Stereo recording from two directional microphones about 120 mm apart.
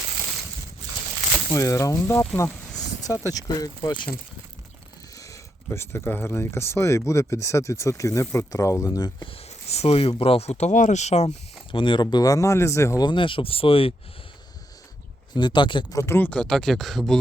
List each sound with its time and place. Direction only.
1.5 s speech: 25° left (ahead or behind)
5.1 s speech: 25° left (ahead or behind)
9.3 s speech: 60° left (ahead or behind)
11.7 s speech: 45° left (ahead or behind); by 13.1 s 25° left (ahead or behind)
13.1 s speech: 45° left (ahead or behind)
15.4 s speech: 40° left (ahead or behind)
16.0 s speech: 20° left (ahead or behind)
16.3 s speech: 5° left (ahead or behind)